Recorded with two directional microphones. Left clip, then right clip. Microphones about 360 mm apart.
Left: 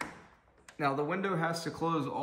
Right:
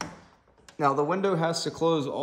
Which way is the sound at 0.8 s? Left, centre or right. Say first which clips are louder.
Right 7 dB; right.